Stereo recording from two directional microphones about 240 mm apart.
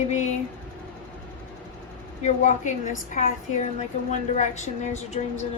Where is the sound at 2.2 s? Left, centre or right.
Left.